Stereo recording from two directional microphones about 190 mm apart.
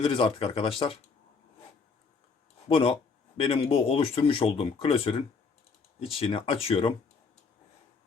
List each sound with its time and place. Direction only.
0.0 s speech: 30° left (ahead or behind)
2.6 s speech: 30° left (ahead or behind)